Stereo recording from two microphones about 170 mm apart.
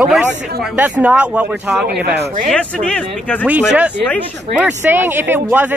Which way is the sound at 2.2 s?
50° right (ahead or behind).